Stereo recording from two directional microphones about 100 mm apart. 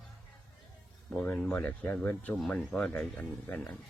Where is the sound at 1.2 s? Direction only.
10° left (ahead or behind).